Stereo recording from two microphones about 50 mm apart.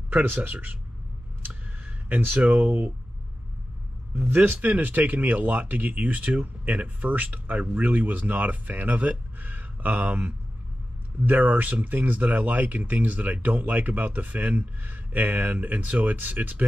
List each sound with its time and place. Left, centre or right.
0.1 s speech: right
1.5 s a sound: right
4.4 s speech: right